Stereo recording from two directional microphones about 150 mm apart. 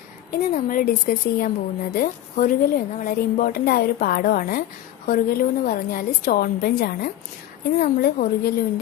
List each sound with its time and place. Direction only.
0.3 s a woman's voice: 65° left (ahead or behind); by 4.6 s 85° left
5.0 s a woman's voice: 70° left (ahead or behind)